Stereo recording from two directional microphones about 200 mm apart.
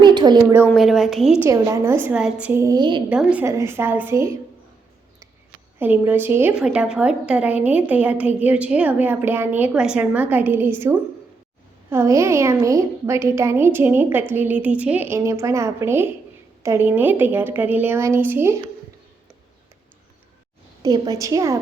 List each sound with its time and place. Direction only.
0.0 s a sound: 20° right (ahead or behind)
0.6 s a woman's voice: centre (ahead or behind)
1.5 s a woman's voice: 15° right (ahead or behind)
3.1 s a woman's voice: 5° right (ahead or behind)
5.8 s a woman's voice: 10° right (ahead or behind)
20.8 s a woman's voice: 20° right (ahead or behind)